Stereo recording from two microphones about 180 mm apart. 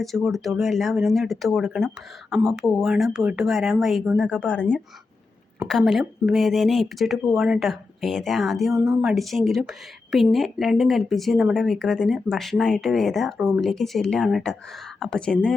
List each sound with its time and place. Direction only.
0.0 s a woman's voice: centre (ahead or behind)
8.7 s speech: 20° right (ahead or behind)
9.0 s a woman's voice: centre (ahead or behind)